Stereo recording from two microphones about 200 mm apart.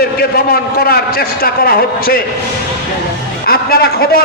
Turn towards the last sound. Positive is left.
turn(degrees=50)  # may be behind; listen again after turning